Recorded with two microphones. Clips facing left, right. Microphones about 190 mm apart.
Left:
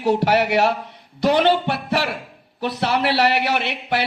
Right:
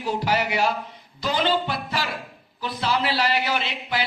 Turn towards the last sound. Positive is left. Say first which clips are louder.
# left 5 dB
turn(degrees=65)  # may be behind; listen again after turning